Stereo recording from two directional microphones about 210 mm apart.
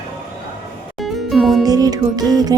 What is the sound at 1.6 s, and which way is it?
Music, 20° right (ahead or behind).